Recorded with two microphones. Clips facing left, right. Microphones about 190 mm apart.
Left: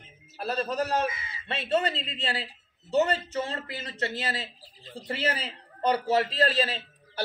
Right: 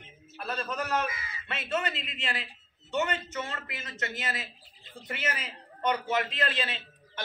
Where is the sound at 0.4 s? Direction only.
35° left (ahead or behind).